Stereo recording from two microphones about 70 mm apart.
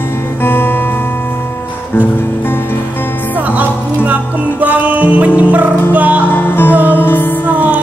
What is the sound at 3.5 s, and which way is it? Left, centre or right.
Music, right.